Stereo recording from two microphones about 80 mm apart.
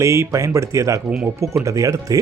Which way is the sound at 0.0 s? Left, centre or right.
Right.